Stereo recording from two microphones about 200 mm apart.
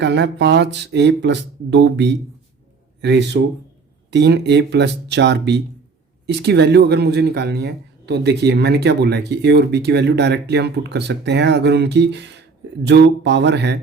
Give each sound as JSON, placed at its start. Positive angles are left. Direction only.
{"t": 0.0, "sound": "speech", "side_deg": -60}